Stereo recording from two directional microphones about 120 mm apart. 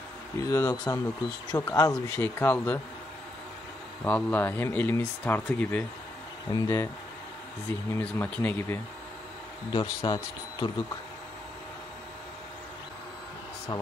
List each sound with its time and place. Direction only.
0.4 s speech: 25° left (ahead or behind)
2.1 s speech: 20° left (ahead or behind)
4.0 s speech: 15° left (ahead or behind)
6.5 s speech: 30° left (ahead or behind)
8.0 s speech: 15° left (ahead or behind)
9.7 s speech: 40° left (ahead or behind)